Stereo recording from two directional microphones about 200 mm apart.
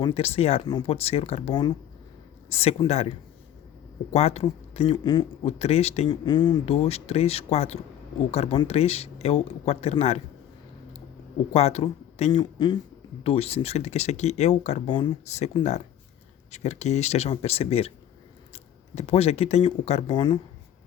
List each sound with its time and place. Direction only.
0.0 s speech: 30° left (ahead or behind)
4.1 s speech: 30° left (ahead or behind)
11.5 s speech: 30° left (ahead or behind)
14.8 s speech: 25° left (ahead or behind)